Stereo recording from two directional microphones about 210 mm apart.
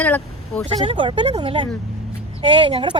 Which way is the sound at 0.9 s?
25° right (ahead or behind).